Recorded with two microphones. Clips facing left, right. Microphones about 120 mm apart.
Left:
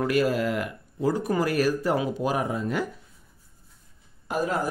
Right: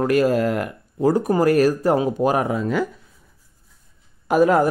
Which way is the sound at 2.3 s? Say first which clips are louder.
Right 6 dB; 85° right.